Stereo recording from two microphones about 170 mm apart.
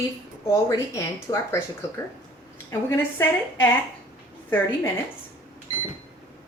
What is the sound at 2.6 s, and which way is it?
A woman's voice, 15° left (ahead or behind).